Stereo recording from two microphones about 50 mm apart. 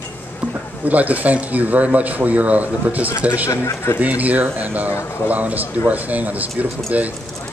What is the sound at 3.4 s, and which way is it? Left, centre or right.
Speech, left.